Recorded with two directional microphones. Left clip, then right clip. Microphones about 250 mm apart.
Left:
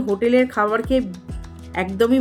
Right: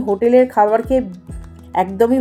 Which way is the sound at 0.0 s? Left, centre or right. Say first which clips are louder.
Right 5 dB; centre.